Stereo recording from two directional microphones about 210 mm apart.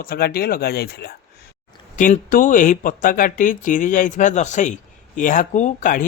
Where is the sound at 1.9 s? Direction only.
40° left (ahead or behind).